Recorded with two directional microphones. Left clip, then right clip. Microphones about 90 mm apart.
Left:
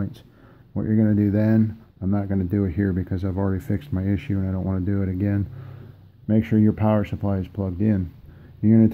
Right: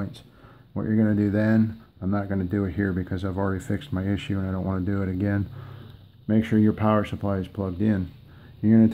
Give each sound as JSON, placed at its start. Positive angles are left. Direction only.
{"t": 0.7, "sound": "speech", "side_deg": 25}
{"t": 1.6, "sound": "speech", "side_deg": 10}
{"t": 2.1, "sound": "speech", "side_deg": 20}
{"t": 4.4, "sound": "speech", "side_deg": 0}
{"t": 6.2, "sound": "speech", "side_deg": 30}
{"t": 6.7, "sound": "speech", "side_deg": 20}
{"t": 7.6, "sound": "speech", "side_deg": -20}
{"t": 8.6, "sound": "speech", "side_deg": 35}